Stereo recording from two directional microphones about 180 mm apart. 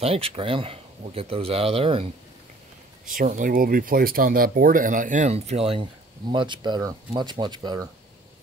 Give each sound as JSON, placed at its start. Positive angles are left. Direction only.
{"t": 0.0, "sound": "speech", "side_deg": -30}
{"t": 3.1, "sound": "speech", "side_deg": -45}